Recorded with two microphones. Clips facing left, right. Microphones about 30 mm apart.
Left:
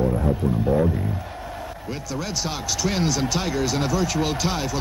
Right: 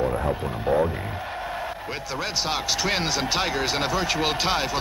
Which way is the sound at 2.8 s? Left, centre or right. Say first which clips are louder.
Left 1 dB; right.